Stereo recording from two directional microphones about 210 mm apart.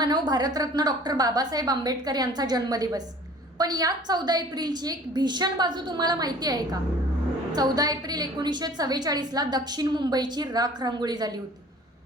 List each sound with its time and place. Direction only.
0.0 s a woman's voice: 20° right (ahead or behind)